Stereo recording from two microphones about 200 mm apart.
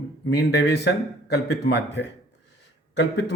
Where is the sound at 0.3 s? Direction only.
60° left (ahead or behind).